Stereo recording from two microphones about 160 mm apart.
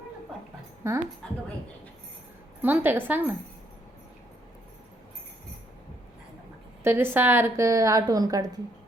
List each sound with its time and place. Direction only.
0.8 s a woman's voice: 15° right (ahead or behind)
1.2 s a woman's voice: 5° left (ahead or behind)
2.6 s a woman's voice: 10° right (ahead or behind)
6.8 s a woman's voice: 15° right (ahead or behind)